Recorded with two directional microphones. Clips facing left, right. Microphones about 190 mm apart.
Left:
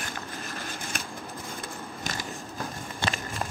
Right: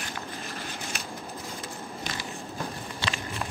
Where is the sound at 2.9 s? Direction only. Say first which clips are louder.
Left 3 dB; 50° left (ahead or behind).